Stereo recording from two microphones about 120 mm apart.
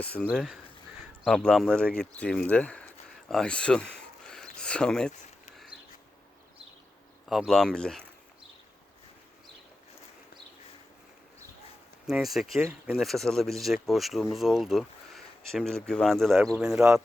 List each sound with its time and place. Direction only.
0.0 s speech: 10° left (ahead or behind)
0.3 s speech: centre (ahead or behind)
4.3 s a sound: 5° left (ahead or behind)
7.3 s speech: centre (ahead or behind)
12.0 s speech: 5° right (ahead or behind)
16.8 s speech: 15° right (ahead or behind)